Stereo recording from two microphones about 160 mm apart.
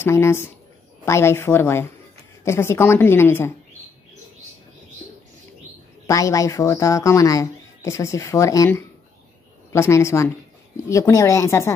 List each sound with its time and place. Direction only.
0.0 s a woman's voice: 15° left (ahead or behind)
6.0 s a woman's voice: 20° left (ahead or behind)